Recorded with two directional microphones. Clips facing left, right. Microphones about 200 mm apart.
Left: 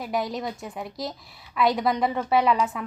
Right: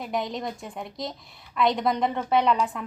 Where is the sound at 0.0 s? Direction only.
5° left (ahead or behind).